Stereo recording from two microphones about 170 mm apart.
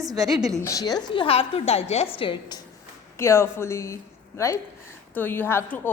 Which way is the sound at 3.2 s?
15° left (ahead or behind).